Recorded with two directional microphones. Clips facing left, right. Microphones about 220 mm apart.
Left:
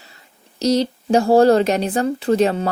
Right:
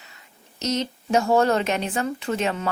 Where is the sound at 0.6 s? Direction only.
35° left (ahead or behind).